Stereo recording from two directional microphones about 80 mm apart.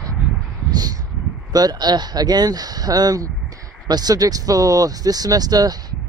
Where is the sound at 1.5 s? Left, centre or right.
Right.